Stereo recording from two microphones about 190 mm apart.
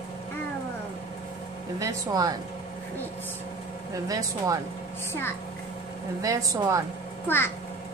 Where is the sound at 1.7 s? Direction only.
20° right (ahead or behind).